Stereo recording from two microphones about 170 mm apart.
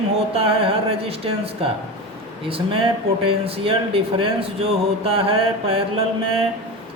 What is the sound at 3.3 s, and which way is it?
Speech, 35° right (ahead or behind).